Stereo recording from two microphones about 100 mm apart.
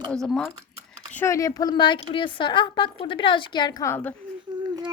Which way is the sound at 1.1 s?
30° left (ahead or behind).